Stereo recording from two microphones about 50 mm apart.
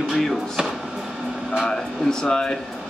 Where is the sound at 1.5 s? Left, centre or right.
Centre.